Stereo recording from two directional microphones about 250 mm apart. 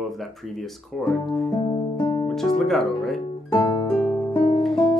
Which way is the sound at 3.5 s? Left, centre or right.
Centre.